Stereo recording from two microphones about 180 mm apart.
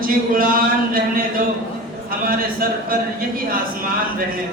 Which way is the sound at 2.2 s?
50° right (ahead or behind).